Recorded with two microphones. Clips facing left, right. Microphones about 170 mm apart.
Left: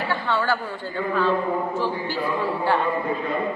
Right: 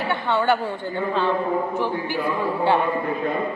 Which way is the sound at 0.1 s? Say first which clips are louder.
Right 4 dB; 20° right (ahead or behind).